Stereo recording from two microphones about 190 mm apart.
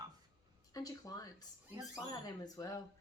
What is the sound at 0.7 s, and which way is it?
A woman's voice, 20° left (ahead or behind).